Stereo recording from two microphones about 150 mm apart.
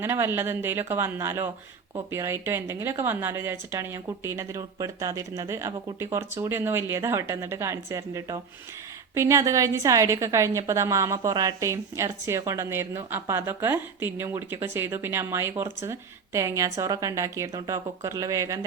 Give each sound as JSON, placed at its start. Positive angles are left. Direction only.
{"t": 0.0, "sound": "a woman's voice", "side_deg": -15}